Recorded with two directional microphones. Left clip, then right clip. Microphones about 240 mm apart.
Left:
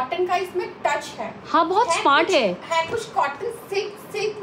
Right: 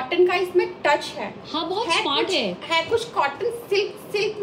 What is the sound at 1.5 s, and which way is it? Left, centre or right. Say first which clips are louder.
A woman's voice: left 5 dB; centre.